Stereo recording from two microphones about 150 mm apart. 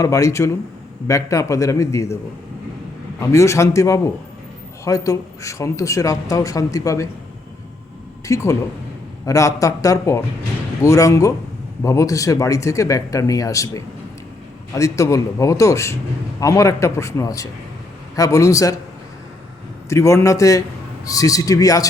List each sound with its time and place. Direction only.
0.0 s a man's voice: 20° left (ahead or behind)
3.2 s a man's voice: 20° left (ahead or behind)
8.3 s a man's voice: 20° left (ahead or behind)
19.9 s a man's voice: 20° left (ahead or behind)